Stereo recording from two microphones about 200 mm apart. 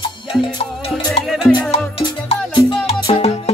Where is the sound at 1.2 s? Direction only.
Centre (ahead or behind).